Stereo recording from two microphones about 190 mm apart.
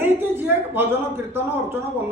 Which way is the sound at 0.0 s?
10° right (ahead or behind).